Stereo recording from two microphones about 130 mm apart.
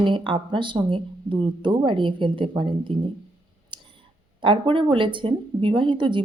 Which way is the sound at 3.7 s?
40° right (ahead or behind).